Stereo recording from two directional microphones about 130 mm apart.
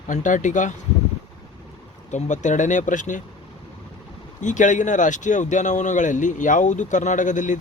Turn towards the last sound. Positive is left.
turn(degrees=75)  # may be behind; listen again after turning